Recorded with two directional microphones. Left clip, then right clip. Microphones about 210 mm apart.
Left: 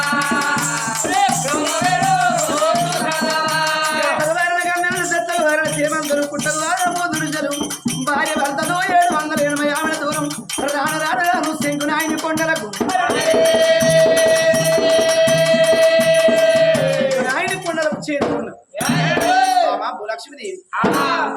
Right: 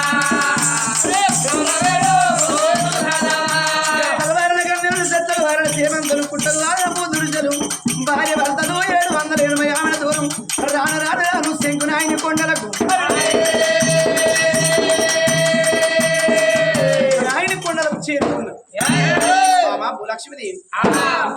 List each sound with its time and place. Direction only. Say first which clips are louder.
0.2 s music: right 1 dB; 10° right (ahead or behind)
1.8 s music: right 2 dB; 10° right (ahead or behind)
3.9 s music: even; 10° right (ahead or behind)
8.1 s music: right 1 dB; centre (ahead or behind)
12.9 s music: even; 15° right (ahead or behind)